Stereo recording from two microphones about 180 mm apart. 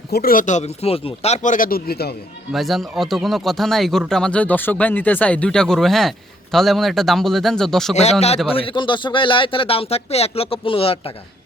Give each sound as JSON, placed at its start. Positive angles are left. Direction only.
{"t": 0.1, "sound": "speech", "side_deg": 55}
{"t": 2.5, "sound": "speech", "side_deg": 0}
{"t": 8.5, "sound": "speech", "side_deg": 30}